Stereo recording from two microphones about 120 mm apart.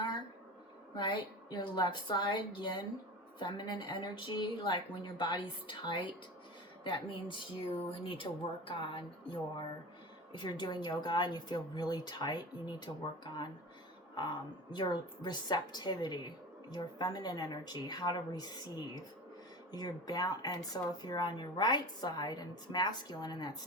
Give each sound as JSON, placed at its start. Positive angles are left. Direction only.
{"t": 0.9, "sound": "speech", "side_deg": 40}